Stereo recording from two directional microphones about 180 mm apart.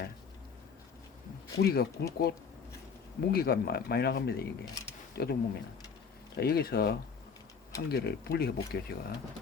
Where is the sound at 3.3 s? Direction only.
55° left (ahead or behind).